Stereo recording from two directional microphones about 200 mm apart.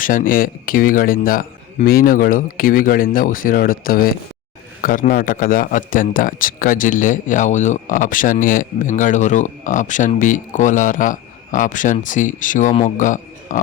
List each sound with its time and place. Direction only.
0.0 s a man's voice: 45° left (ahead or behind)